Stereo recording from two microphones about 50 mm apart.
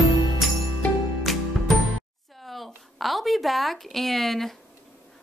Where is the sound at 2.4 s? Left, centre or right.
Centre.